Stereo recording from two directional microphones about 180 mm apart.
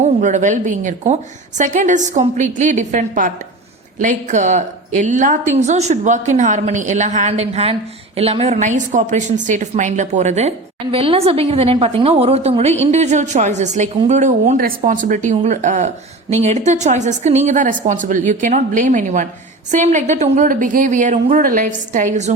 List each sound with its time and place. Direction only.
0.2 s a woman's voice: 45° right (ahead or behind)